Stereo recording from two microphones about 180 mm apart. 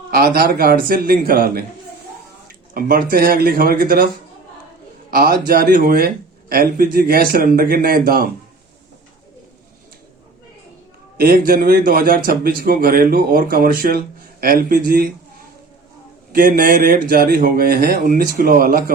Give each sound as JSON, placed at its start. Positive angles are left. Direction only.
{"t": 0.1, "sound": "speech", "side_deg": -55}
{"t": 5.1, "sound": "speech", "side_deg": -55}
{"t": 11.2, "sound": "a man's voice", "side_deg": -55}
{"t": 16.3, "sound": "a man's voice", "side_deg": -50}